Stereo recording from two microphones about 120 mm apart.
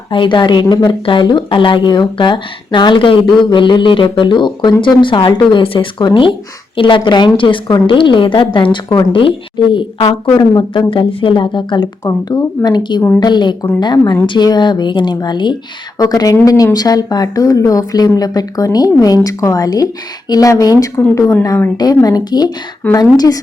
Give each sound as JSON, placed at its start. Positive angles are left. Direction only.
{"t": 0.1, "sound": "a woman's voice", "side_deg": 40}
{"t": 12.0, "sound": "speech", "side_deg": 30}